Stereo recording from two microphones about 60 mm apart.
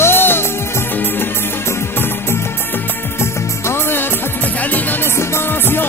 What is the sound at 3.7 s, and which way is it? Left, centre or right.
Music of bollywood, left.